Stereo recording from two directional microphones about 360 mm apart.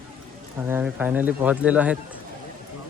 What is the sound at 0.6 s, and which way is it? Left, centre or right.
Speech, centre.